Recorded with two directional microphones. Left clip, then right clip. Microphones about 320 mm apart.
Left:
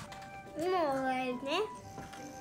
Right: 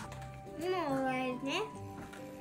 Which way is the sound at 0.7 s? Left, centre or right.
Left.